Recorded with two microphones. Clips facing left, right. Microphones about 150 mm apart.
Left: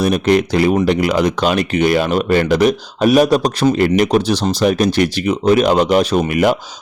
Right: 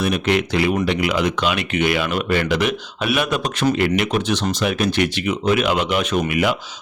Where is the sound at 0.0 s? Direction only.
40° left (ahead or behind).